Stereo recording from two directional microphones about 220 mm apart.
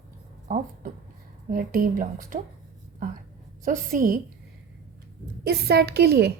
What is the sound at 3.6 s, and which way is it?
Speech, 35° right (ahead or behind).